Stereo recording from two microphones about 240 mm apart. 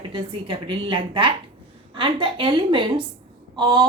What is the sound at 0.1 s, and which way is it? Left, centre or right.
A woman's voice, right.